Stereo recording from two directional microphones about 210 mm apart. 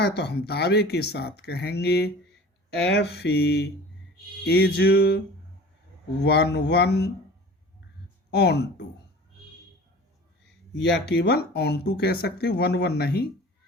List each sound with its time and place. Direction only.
0.0 s speech: 50° left (ahead or behind)
6.2 s speech: 50° left (ahead or behind)
8.3 s speech: 50° left (ahead or behind)
10.8 s speech: 50° left (ahead or behind)